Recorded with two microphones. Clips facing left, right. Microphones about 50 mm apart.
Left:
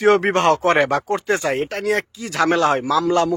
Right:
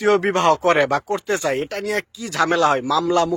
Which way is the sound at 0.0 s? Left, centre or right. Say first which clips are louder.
Left 1 dB; left.